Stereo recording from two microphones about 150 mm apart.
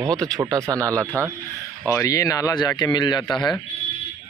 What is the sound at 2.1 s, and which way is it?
Speech, 25° left (ahead or behind).